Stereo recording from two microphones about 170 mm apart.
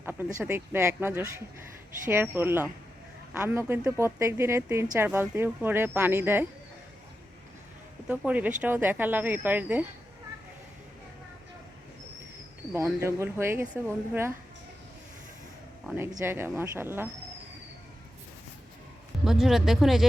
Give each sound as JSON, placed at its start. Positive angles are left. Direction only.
{"t": 0.0, "sound": "speech", "side_deg": -10}
{"t": 8.0, "sound": "speech", "side_deg": -5}
{"t": 13.0, "sound": "speech", "side_deg": -15}
{"t": 16.0, "sound": "speech", "side_deg": -15}
{"t": 19.2, "sound": "speech", "side_deg": 0}